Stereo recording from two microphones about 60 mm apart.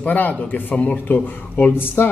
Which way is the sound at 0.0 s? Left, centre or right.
Left.